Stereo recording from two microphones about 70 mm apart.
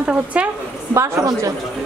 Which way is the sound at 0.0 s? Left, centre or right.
Centre.